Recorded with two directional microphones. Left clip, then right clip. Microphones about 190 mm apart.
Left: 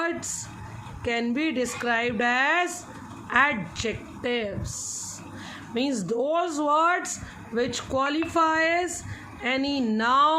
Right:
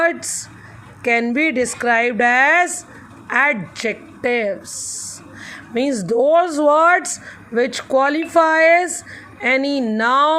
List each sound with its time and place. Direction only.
0.0 s a woman's voice: 45° right (ahead or behind)